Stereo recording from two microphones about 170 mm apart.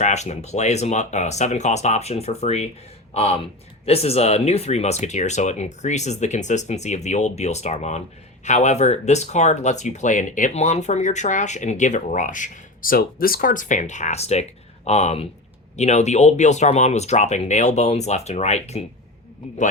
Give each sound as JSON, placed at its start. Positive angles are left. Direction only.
{"t": 0.0, "sound": "speech", "side_deg": 40}